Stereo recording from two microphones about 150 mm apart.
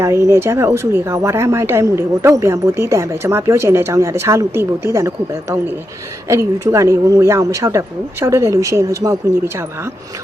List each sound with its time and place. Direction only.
0.0 s a woman's voice: 20° right (ahead or behind)